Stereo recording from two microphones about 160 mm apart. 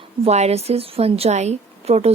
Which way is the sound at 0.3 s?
40° right (ahead or behind).